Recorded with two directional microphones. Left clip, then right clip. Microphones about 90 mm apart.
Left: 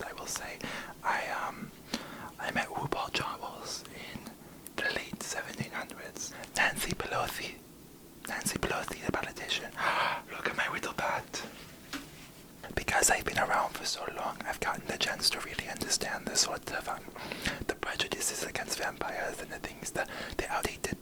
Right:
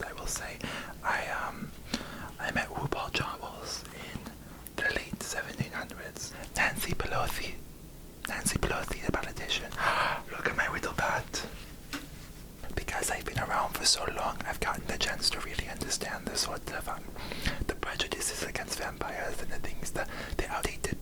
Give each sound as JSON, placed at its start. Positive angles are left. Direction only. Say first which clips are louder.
{"t": 0.1, "sound": "whispering", "louder": "right 1 dB", "side_deg": 20}
{"t": 8.4, "sound": "whispering", "louder": "right 1 dB", "side_deg": 5}
{"t": 8.6, "sound": "whispering", "louder": "right 1 dB", "side_deg": 15}
{"t": 12.7, "sound": "whispering", "louder": "left 6 dB", "side_deg": 90}
{"t": 13.7, "sound": "whispering", "louder": "right 7 dB", "side_deg": -15}
{"t": 14.1, "sound": "whispering", "louder": "right 3 dB", "side_deg": -5}
{"t": 14.3, "sound": "whispering", "louder": "right 1 dB", "side_deg": 15}